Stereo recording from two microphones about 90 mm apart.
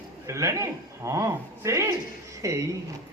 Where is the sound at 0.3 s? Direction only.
35° right (ahead or behind).